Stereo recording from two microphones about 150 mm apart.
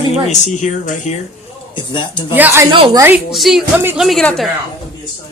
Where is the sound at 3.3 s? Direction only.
Centre (ahead or behind).